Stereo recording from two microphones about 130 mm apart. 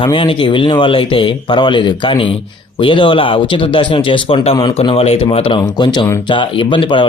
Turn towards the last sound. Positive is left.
turn(degrees=40)  # may be behind; listen again after turning